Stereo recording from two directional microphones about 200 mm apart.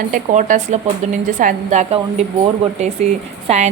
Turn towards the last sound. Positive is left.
turn(degrees=-35)  # may be behind; listen again after turning